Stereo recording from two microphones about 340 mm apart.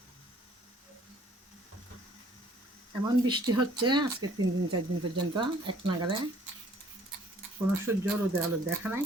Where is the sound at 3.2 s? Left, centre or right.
Centre.